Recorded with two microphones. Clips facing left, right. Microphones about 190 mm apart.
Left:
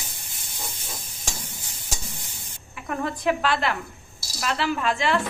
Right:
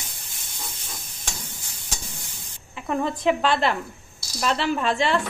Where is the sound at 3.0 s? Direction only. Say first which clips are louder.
Right 1 dB; 25° right (ahead or behind).